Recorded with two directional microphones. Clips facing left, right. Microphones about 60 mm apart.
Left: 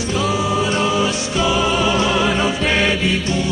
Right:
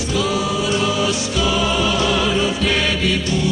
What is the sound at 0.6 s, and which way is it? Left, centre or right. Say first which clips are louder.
Music: left 1 dB; left.